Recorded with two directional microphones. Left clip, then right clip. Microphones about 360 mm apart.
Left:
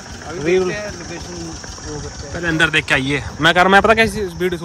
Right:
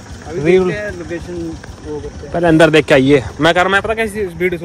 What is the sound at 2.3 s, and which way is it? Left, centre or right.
Speech, centre.